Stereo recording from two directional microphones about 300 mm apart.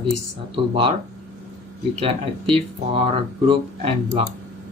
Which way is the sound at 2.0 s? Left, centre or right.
Centre.